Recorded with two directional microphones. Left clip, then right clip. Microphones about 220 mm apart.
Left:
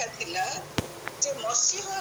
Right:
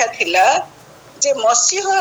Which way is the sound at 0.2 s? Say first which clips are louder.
Right 18 dB; 35° right (ahead or behind).